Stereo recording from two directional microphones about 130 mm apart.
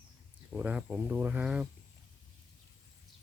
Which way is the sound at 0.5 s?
10° right (ahead or behind).